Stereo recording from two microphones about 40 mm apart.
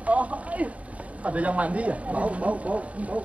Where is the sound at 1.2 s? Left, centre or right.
Right.